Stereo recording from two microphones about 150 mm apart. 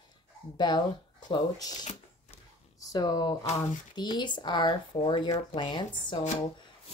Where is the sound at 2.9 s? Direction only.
25° left (ahead or behind).